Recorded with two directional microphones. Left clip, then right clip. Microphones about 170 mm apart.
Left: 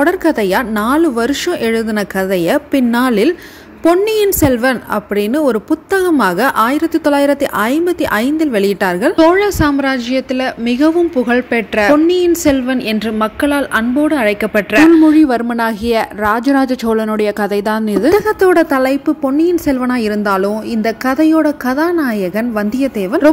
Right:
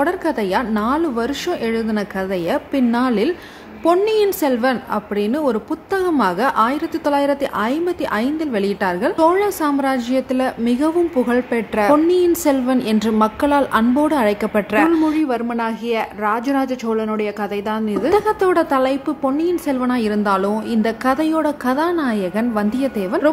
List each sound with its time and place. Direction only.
0.0 s a woman's voice: 20° left (ahead or behind)
15.0 s speech: 30° left (ahead or behind)